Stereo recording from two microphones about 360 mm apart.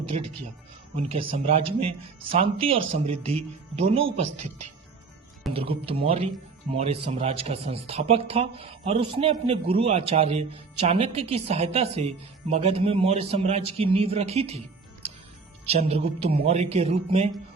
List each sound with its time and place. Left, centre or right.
1.0 s speech: centre
4.0 s speech: right
5.5 s speech: centre
15.6 s speech: centre